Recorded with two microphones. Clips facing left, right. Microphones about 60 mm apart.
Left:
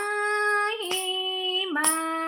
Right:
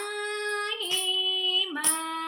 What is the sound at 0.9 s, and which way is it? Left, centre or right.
Female singing, left.